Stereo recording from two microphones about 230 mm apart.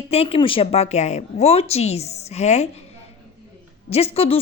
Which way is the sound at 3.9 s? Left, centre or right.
Left.